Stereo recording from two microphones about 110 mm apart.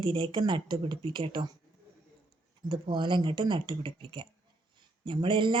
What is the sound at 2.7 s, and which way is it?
Speech, 45° right (ahead or behind).